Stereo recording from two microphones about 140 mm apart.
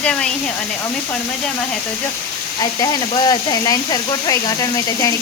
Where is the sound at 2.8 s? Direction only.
30° left (ahead or behind).